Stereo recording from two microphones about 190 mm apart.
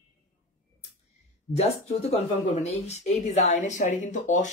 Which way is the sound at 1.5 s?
35° left (ahead or behind).